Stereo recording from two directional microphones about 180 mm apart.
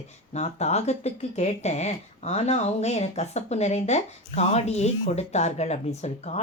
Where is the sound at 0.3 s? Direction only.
35° left (ahead or behind).